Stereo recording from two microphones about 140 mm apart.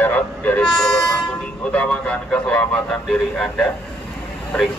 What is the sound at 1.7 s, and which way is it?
Speech, 10° left (ahead or behind).